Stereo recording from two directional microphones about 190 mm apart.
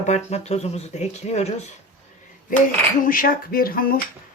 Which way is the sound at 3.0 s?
50° left (ahead or behind).